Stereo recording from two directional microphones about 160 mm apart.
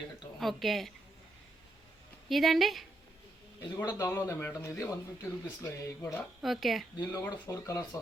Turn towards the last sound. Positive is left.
turn(degrees=20)  # may be behind; listen again after turning